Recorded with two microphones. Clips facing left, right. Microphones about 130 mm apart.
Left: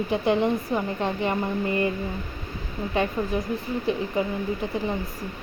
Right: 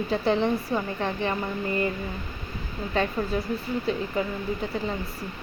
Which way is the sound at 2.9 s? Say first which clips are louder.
Left 1 dB; 15° left (ahead or behind).